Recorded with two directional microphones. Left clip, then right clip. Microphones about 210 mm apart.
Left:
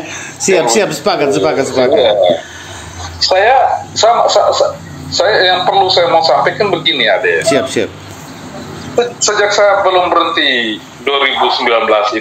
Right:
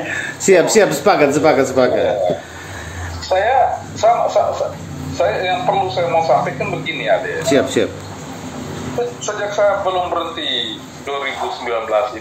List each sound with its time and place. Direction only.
0.6 s speech: 25° left (ahead or behind); by 7.3 s 40° left (ahead or behind)
7.4 s speech: 25° left (ahead or behind)
9.3 s speech: 40° left (ahead or behind)